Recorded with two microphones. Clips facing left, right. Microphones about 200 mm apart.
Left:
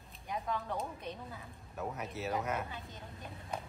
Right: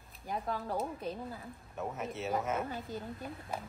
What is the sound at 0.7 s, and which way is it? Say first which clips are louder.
Speech: right 4 dB; centre (ahead or behind).